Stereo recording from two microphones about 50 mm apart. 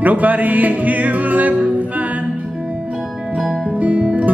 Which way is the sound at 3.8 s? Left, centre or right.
Right.